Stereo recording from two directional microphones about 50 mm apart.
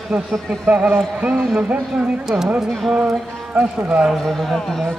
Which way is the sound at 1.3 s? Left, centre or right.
Centre.